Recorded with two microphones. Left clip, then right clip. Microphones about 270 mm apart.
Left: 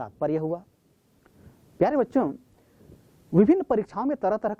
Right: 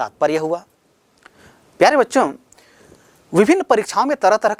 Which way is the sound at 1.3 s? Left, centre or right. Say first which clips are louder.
Right 11 dB; centre.